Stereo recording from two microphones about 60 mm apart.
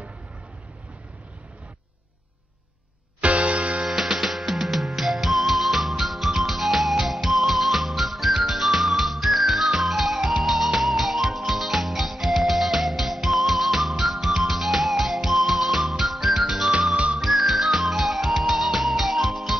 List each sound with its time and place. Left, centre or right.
3.2 s music: right
3.8 s music: centre